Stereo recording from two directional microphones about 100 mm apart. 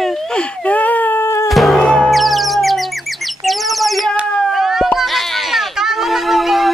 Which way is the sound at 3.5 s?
Centre (ahead or behind).